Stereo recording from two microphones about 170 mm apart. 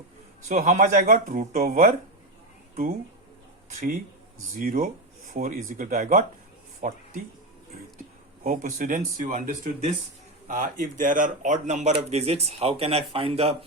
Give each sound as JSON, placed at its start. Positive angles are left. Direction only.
{"t": 0.4, "sound": "speech", "side_deg": -45}
{"t": 3.8, "sound": "speech", "side_deg": -55}
{"t": 8.4, "sound": "speech", "side_deg": -50}